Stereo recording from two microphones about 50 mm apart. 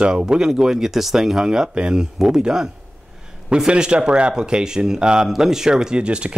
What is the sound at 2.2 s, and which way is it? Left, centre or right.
Speech, centre.